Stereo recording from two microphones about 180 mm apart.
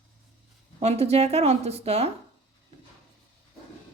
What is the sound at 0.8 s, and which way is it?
Speech, 35° right (ahead or behind).